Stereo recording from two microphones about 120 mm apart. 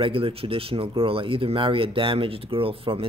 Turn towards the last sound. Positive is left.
turn(degrees=-50)  # may be behind; listen again after turning